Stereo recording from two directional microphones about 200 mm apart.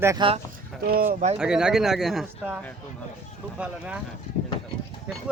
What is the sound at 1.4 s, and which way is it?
Speech, 5° right (ahead or behind).